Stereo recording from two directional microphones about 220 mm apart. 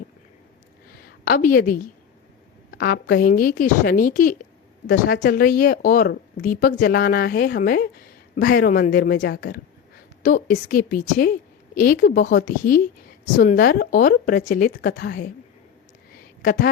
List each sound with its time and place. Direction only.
1.2 s speech: 40° left (ahead or behind)
10.2 s speech: 40° left (ahead or behind)
16.4 s speech: 40° left (ahead or behind)